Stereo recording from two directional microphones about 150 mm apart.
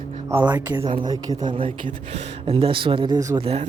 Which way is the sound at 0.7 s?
30° right (ahead or behind).